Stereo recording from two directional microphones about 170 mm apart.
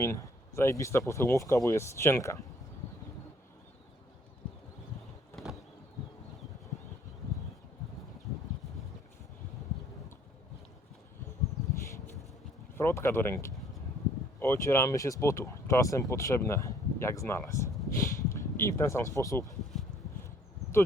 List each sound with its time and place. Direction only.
0.0 s speech: 15° left (ahead or behind)
12.7 s speech: 15° left (ahead or behind)